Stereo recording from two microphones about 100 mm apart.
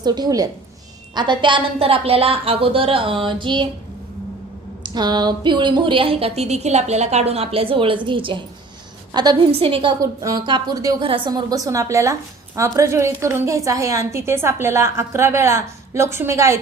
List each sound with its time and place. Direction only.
0.0 s a woman's voice: 45° right (ahead or behind)
4.8 s a woman's voice: 45° right (ahead or behind)
9.6 s a woman's voice: 65° right (ahead or behind)
10.0 s a woman's voice: 35° right (ahead or behind)
10.4 s a woman's voice: 45° right (ahead or behind)